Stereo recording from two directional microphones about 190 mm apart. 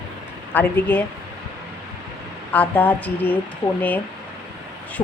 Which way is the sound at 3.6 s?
25° left (ahead or behind).